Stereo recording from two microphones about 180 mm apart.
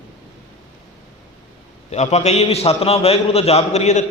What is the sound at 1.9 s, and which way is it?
A man's voice, 40° left (ahead or behind).